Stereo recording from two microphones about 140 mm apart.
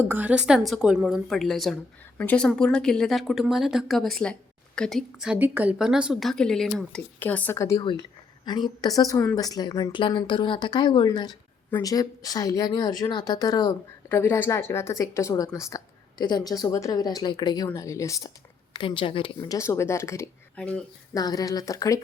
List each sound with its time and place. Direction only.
0.0 s a woman's voice: 15° right (ahead or behind); by 7.8 s 20° left (ahead or behind)
7.8 s a woman's voice: 30° left (ahead or behind)
14.1 s a woman's voice: 15° left (ahead or behind)
18.7 s speech: 35° left (ahead or behind)
19.4 s a woman's voice: 25° left (ahead or behind)
20.6 s speech: 5° left (ahead or behind)
21.1 s a woman's voice: 25° left (ahead or behind)